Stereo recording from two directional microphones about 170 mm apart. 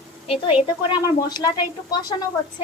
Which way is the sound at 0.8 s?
25° left (ahead or behind).